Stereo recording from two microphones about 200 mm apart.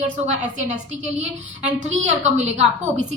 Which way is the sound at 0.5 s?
35° right (ahead or behind).